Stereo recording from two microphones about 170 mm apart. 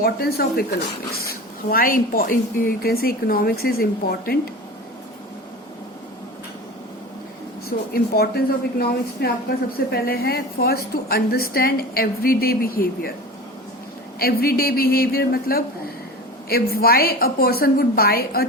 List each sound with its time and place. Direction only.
0.0 s a woman's voice: 65° left (ahead or behind)
7.9 s a woman's voice: 65° left (ahead or behind)
14.2 s a woman's voice: 65° left (ahead or behind)